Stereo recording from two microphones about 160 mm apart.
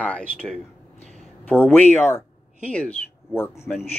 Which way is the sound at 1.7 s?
10° left (ahead or behind).